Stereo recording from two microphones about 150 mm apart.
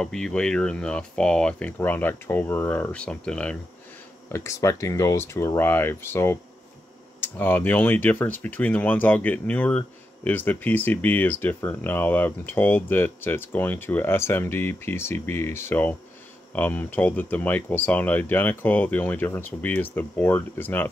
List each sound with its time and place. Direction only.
0.0 s speech: 5° left (ahead or behind)
4.3 s speech: 20° left (ahead or behind)